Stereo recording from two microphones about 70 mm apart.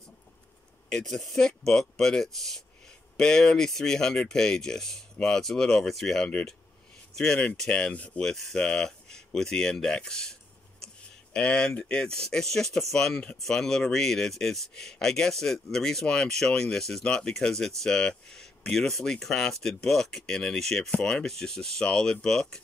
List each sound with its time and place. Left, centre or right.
0.8 s speech: centre
8.2 s speech: centre
11.3 s speech: centre